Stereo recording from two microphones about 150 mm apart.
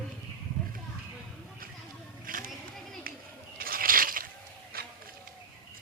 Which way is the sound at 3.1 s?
80° right.